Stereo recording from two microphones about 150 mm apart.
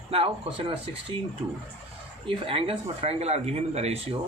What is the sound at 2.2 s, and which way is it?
Speech, 35° right (ahead or behind).